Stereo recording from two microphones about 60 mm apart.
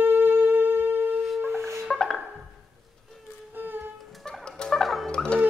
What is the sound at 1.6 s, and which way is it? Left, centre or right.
Music, right.